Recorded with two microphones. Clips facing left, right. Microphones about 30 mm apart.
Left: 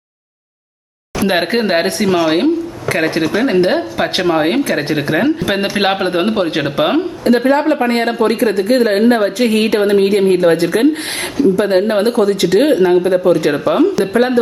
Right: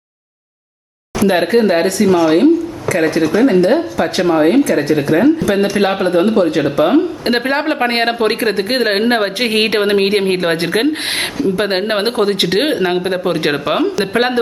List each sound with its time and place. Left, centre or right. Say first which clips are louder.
1.3 s speech: right 2 dB; left
4.2 s speech: right 2 dB; left
4.4 s speech: right 3 dB; left
7.3 s speech: left 4 dB; right